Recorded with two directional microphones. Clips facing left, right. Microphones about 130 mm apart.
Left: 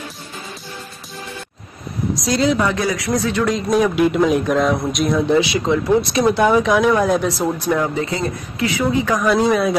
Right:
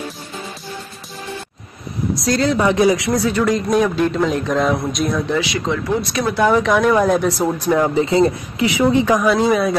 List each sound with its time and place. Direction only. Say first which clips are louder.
2.2 s speech: even; 15° left (ahead or behind)
2.6 s speech: right 5 dB; 20° right (ahead or behind)
3.2 s speech: right 2 dB; 5° right (ahead or behind)
5.3 s speech: left 4 dB; 25° left (ahead or behind)
6.4 s speech: right 2 dB; 5° left (ahead or behind); by 7.8 s 10° right (ahead or behind)
7.8 s speech: right 6 dB; 25° right (ahead or behind)
9.2 s speech: even; centre (ahead or behind)